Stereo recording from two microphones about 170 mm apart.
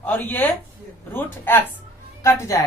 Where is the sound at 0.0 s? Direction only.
10° left (ahead or behind).